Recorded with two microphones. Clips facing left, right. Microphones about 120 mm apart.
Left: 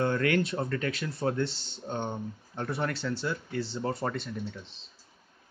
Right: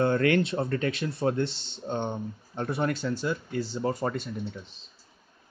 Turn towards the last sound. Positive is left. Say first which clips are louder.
# right 2 dB
turn(degrees=-15)  # may be behind; listen again after turning